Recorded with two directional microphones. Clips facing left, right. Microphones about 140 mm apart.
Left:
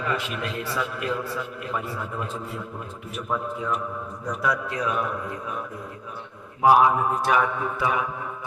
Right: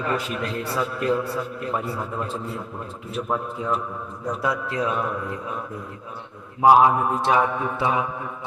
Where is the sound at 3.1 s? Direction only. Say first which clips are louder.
Right 2 dB; 30° right (ahead or behind).